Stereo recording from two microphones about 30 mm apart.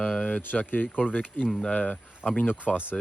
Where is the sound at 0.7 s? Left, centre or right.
Left.